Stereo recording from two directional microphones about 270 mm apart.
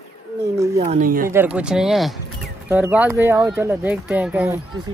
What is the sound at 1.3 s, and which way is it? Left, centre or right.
Speech, centre.